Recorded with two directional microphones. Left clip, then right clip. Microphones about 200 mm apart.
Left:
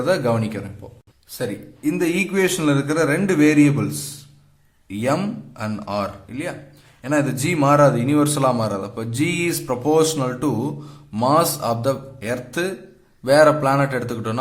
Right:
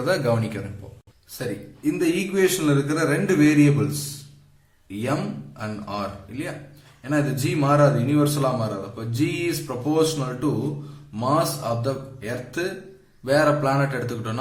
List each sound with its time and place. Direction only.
0.0 s a man's voice: 25° left (ahead or behind)